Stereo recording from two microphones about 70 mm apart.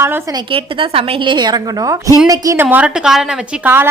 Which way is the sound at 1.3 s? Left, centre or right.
Right.